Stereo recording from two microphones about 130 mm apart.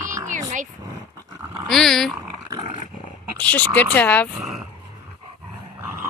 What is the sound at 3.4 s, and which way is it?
Speech, 10° left (ahead or behind).